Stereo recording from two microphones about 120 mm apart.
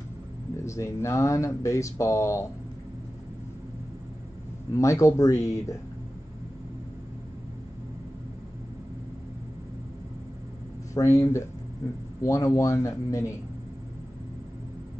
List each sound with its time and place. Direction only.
0.7 s speech: 25° left (ahead or behind)
4.7 s speech: 25° left (ahead or behind)
11.0 s speech: 30° left (ahead or behind)